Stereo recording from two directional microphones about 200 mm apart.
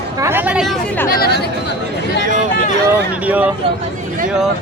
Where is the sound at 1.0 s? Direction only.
50° left (ahead or behind).